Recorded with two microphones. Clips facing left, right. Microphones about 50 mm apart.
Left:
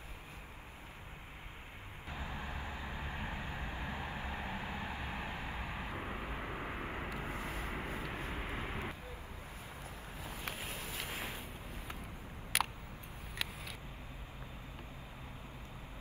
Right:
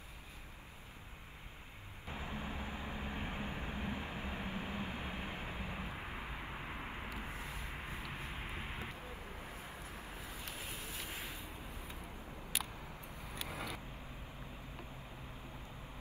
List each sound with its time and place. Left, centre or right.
3.1 s vehicle: left
3.7 s vehicle: left
10.2 s boat: left
12.5 s a sound: left
13.5 s vehicle: right